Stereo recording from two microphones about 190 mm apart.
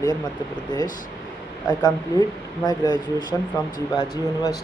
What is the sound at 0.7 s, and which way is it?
Speech, 20° left (ahead or behind).